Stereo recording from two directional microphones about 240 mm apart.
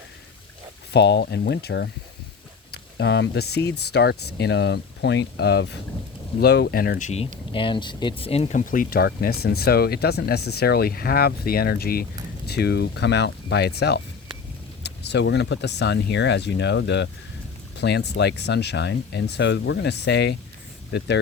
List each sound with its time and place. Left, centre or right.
0.9 s speech: left
7.5 s speech: centre; by 20.3 s left